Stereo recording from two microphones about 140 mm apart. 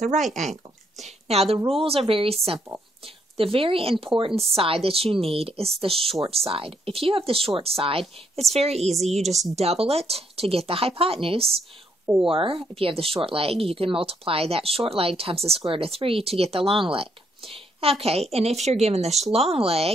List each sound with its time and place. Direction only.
0.3 s speech: 60° right (ahead or behind)
1.0 s speech: 50° right (ahead or behind)
3.3 s speech: 40° right (ahead or behind)